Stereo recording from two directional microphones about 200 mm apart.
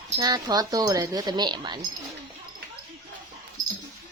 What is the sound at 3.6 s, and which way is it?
Mouse, 40° right (ahead or behind).